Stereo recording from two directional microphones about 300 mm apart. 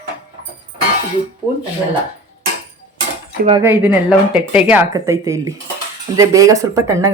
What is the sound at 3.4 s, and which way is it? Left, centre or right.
Speech, centre.